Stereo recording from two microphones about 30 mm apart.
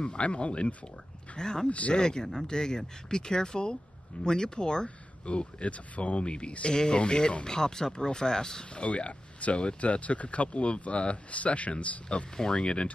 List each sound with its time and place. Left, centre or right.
0.2 s speech: left
1.3 s speech: left
1.7 s speech: left
2.0 s speech: left
4.8 s speech: left
6.7 s speech: left
8.8 s speech: left
12.1 s speech: left